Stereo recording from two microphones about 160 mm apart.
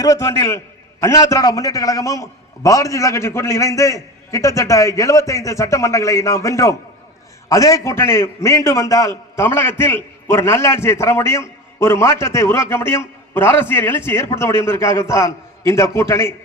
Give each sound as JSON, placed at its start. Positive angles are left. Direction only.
{"t": 0.0, "sound": "a man's voice", "side_deg": 20}